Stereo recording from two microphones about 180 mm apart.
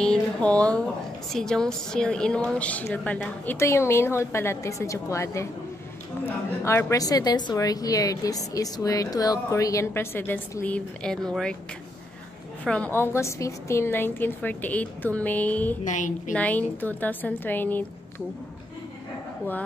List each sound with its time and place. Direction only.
0.0 s a sound: 5° left (ahead or behind)
1.3 s a woman's voice: 5° left (ahead or behind)
12.6 s speech: 5° left (ahead or behind)
15.8 s a woman's voice: 45° left (ahead or behind)
16.3 s speech: 10° left (ahead or behind)